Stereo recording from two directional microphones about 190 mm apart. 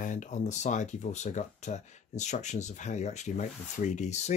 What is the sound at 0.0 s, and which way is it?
Speech, 40° left (ahead or behind).